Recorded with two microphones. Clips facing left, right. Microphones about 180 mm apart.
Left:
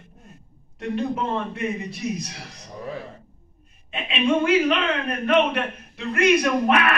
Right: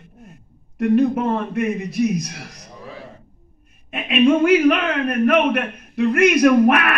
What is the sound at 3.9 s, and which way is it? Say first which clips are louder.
A man's voice: right 6 dB; 60° right (ahead or behind).